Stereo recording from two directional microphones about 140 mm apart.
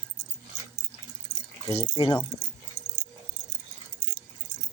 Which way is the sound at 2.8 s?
60° right (ahead or behind).